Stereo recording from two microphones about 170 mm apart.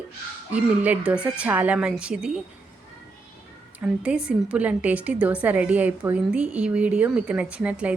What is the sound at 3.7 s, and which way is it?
A woman's voice, 5° right (ahead or behind).